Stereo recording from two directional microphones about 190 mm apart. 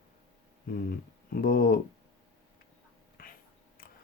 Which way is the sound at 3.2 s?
50° left (ahead or behind).